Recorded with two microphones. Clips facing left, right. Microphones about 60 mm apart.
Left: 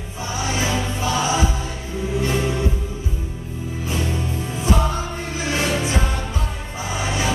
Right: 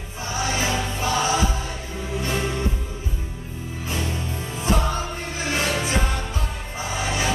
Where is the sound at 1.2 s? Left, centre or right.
Left.